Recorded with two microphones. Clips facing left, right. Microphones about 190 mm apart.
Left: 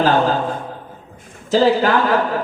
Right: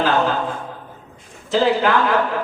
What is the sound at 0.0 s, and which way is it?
A man's voice, 40° left (ahead or behind).